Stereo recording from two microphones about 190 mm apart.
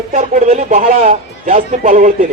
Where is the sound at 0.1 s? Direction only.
35° right (ahead or behind).